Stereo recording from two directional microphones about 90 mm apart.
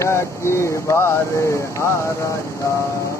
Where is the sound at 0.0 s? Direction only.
30° left (ahead or behind).